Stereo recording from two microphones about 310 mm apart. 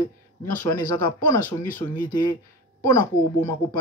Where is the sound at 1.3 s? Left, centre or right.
Centre.